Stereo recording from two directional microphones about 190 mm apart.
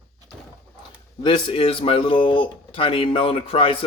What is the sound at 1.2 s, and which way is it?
Speech, 25° left (ahead or behind).